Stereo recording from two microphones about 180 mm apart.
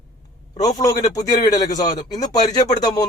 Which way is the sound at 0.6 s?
20° left (ahead or behind).